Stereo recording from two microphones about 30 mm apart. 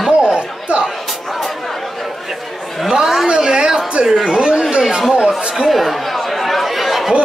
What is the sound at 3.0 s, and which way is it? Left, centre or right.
Speech, centre.